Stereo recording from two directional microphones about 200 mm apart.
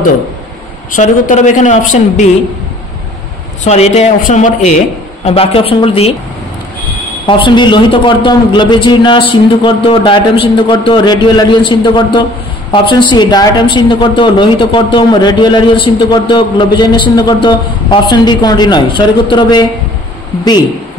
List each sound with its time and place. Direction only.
0.9 s speech: 40° left (ahead or behind)
3.6 s speech: 35° left (ahead or behind)
7.2 s speech: 25° left (ahead or behind)